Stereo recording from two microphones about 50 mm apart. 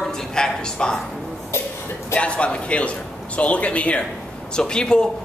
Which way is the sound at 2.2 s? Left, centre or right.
Left.